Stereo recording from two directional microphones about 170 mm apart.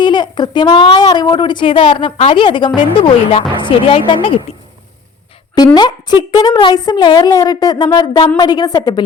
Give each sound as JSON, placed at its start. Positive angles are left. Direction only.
{"t": 0.0, "sound": "speech", "side_deg": 25}
{"t": 5.5, "sound": "speech", "side_deg": 25}